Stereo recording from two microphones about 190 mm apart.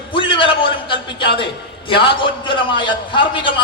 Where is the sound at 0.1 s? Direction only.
25° left (ahead or behind).